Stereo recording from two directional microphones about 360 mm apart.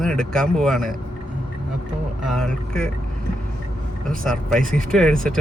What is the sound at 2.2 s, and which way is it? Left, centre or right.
Speech, centre.